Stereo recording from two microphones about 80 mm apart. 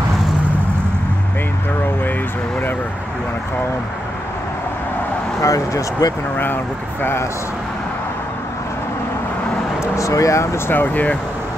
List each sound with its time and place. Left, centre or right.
5.4 s speech: left
6.3 s speech: left
9.9 s speech: left